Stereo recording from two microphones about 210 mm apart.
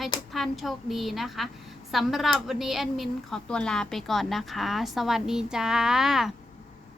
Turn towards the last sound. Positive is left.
turn(degrees=0)  # may be behind; listen again after turning